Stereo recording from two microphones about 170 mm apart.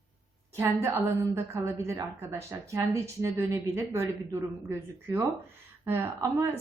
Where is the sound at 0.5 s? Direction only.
15° right (ahead or behind).